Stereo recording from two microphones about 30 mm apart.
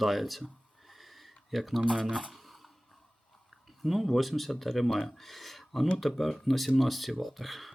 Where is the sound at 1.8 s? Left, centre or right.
Right.